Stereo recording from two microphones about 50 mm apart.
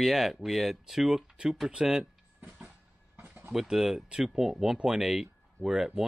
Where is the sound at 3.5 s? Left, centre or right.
Centre.